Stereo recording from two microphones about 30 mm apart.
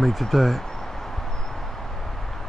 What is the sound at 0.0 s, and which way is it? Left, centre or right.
Speech, centre.